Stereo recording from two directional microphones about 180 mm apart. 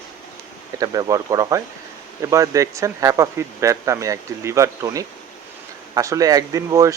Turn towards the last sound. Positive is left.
turn(degrees=-20)  # may be behind; listen again after turning